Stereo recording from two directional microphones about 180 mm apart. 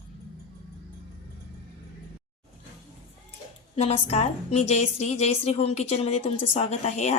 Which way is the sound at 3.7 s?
35° left (ahead or behind).